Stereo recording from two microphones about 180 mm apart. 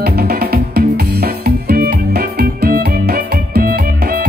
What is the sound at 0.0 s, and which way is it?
Music, 60° right (ahead or behind).